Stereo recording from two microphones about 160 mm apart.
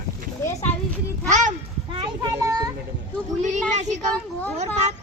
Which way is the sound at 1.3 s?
50° right (ahead or behind).